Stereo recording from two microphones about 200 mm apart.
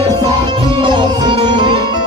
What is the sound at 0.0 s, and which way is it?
Music, 25° right (ahead or behind).